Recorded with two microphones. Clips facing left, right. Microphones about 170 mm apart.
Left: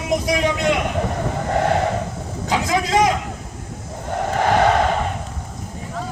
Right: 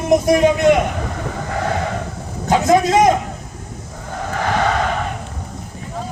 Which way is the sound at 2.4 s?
50° right (ahead or behind).